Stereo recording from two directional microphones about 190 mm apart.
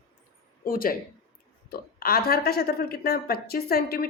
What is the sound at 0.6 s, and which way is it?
Speech, 50° left (ahead or behind).